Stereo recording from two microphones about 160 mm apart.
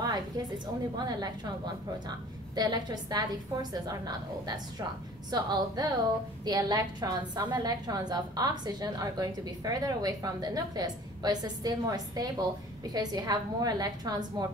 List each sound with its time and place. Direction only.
0.0 s a woman's voice: 25° right (ahead or behind)